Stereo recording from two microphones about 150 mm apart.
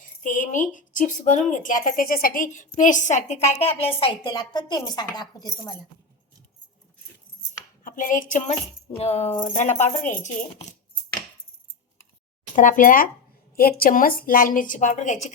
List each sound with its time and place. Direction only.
0.2 s speech: 60° left (ahead or behind); by 5.7 s 30° left (ahead or behind)
7.9 s speech: 60° left (ahead or behind)
9.0 s speech: 40° left (ahead or behind)
9.6 s speech: 50° left (ahead or behind)
12.5 s speech: 60° left (ahead or behind)
13.6 s a woman's voice: 80° left; by 15.3 s 55° left (ahead or behind)